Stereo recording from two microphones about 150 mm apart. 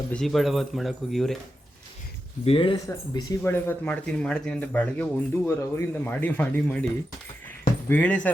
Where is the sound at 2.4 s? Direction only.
40° left (ahead or behind).